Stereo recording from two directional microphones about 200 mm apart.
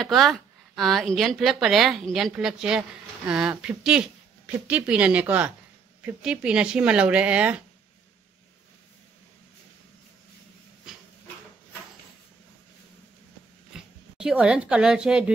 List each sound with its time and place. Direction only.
0.0 s speech: centre (ahead or behind)
10.9 s a sound: centre (ahead or behind)
13.7 s speech: 5° right (ahead or behind)